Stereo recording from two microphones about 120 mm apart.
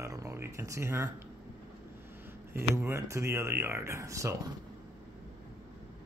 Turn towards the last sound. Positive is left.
turn(degrees=-25)  # may be behind; listen again after turning